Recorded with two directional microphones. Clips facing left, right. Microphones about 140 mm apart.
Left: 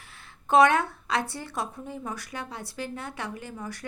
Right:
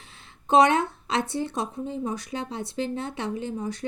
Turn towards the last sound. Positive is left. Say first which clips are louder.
# right 7 dB
turn(degrees=-20)  # may be behind; listen again after turning